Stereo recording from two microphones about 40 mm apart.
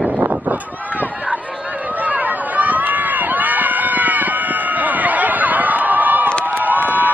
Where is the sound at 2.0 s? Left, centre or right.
Right.